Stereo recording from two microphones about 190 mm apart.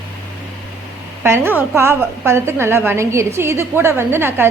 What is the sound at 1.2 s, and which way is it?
A woman's voice, 10° right (ahead or behind).